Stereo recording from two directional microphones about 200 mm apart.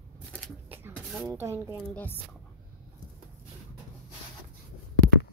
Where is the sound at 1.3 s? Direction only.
15° right (ahead or behind).